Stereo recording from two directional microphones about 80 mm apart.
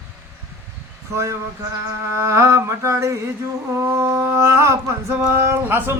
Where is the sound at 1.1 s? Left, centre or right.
Right.